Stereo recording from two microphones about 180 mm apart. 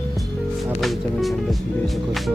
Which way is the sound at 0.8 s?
Centre (ahead or behind).